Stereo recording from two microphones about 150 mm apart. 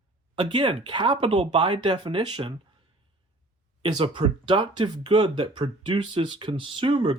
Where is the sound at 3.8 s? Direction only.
35° right (ahead or behind).